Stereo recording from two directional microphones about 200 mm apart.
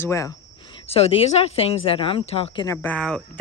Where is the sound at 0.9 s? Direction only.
30° left (ahead or behind).